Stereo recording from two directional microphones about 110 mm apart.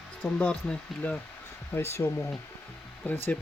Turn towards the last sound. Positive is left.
turn(degrees=15)  # may be behind; listen again after turning